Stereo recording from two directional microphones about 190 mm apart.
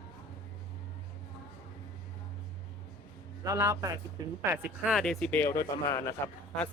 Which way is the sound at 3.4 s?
15° right (ahead or behind).